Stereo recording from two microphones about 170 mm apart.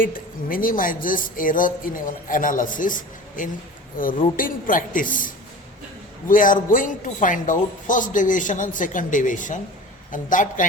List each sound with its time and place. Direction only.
0.0 s speech: 55° left (ahead or behind)